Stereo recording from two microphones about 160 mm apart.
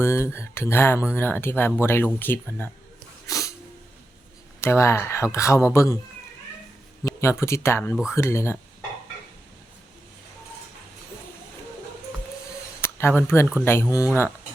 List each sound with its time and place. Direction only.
0.0 s speech: 15° left (ahead or behind)
3.2 s sneeze: 20° left (ahead or behind)
4.6 s speech: 15° left (ahead or behind)
7.0 s speech: 15° left (ahead or behind)
13.0 s speech: 15° left (ahead or behind)